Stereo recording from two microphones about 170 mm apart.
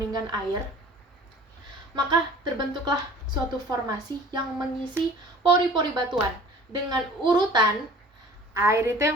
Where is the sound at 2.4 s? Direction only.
25° right (ahead or behind).